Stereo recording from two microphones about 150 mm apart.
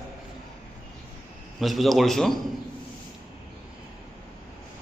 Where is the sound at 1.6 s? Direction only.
Centre (ahead or behind).